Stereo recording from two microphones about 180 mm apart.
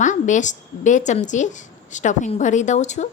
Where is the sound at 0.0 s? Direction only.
45° left (ahead or behind).